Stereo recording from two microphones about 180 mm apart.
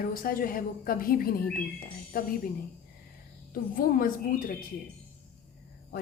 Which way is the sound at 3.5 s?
50° left (ahead or behind).